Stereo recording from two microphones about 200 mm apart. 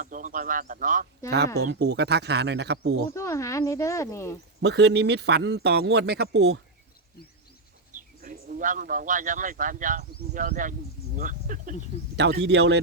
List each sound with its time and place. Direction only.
0.0 s speech: 40° right (ahead or behind)
1.5 s speech: 60° right (ahead or behind)
3.1 s speech: 15° left (ahead or behind)
4.6 s speech: 60° right (ahead or behind)
7.9 s a man's voice: 45° right (ahead or behind)
12.1 s speech: 55° right (ahead or behind)